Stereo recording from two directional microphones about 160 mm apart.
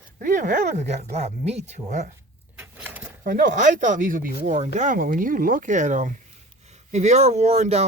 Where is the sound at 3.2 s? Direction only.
55° right (ahead or behind).